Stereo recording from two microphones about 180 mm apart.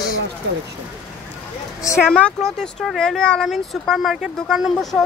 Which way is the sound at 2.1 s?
5° left (ahead or behind).